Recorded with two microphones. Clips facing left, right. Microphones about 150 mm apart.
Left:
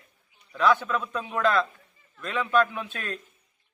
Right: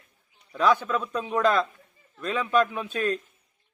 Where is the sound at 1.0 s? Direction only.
35° right (ahead or behind).